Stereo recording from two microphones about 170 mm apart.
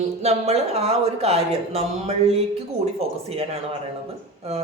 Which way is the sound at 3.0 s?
40° right (ahead or behind).